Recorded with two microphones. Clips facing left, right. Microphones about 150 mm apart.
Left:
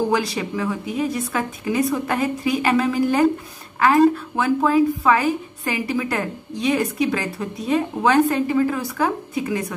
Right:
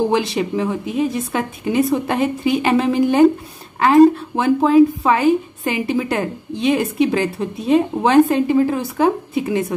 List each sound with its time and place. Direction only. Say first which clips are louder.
0.1 s a woman's voice: right 4 dB; 25° right (ahead or behind)